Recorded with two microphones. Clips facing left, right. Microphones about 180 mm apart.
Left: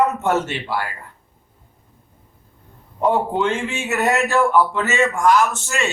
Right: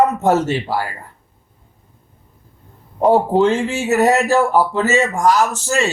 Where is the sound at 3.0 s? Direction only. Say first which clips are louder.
Right 6 dB; 35° right (ahead or behind).